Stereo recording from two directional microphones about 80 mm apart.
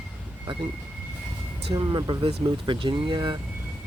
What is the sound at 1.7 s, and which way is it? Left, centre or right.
Speech, right.